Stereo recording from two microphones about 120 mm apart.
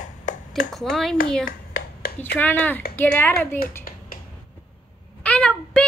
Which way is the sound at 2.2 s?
15° left (ahead or behind).